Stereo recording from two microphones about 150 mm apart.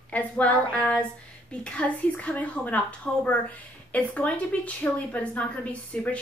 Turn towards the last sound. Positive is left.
turn(degrees=10)  # may be behind; listen again after turning